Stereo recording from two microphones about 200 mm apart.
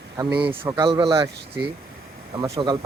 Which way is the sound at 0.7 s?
25° right (ahead or behind).